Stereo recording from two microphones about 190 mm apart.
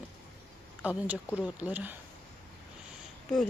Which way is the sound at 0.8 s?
5° right (ahead or behind).